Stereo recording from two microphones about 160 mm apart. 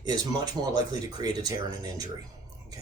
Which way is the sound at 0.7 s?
25° right (ahead or behind).